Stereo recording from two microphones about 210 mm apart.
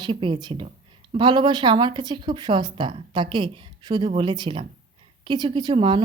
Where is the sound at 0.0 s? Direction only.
25° right (ahead or behind).